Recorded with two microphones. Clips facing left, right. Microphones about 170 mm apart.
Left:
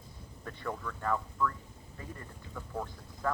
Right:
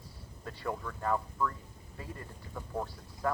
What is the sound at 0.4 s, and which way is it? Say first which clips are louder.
Speech: right 1 dB; 30° right (ahead or behind).